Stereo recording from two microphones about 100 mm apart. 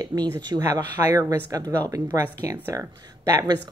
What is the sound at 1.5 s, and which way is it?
Speech, 35° right (ahead or behind).